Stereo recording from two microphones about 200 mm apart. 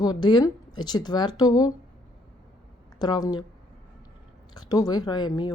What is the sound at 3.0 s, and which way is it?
Speech, 20° left (ahead or behind).